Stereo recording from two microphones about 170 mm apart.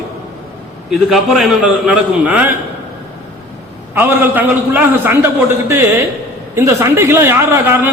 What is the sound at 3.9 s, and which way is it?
A man's voice, 10° right (ahead or behind).